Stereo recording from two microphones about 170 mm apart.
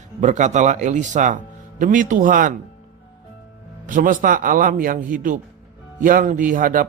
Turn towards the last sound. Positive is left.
turn(degrees=-55)  # may be behind; listen again after turning